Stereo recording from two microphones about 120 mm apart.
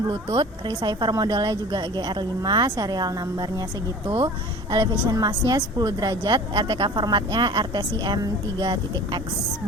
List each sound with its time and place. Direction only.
0.1 s a woman's voice: 40° right (ahead or behind)